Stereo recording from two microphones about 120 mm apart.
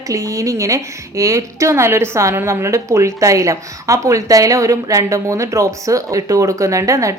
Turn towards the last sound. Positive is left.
turn(degrees=-25)  # may be behind; listen again after turning